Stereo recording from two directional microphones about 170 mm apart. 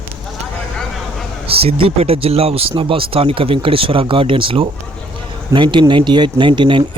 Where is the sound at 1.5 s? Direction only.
35° right (ahead or behind).